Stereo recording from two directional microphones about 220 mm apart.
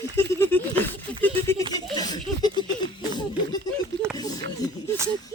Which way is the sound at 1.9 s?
20° left (ahead or behind).